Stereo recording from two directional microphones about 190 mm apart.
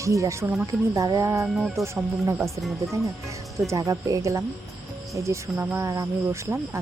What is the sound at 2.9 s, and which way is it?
Speech, 15° right (ahead or behind).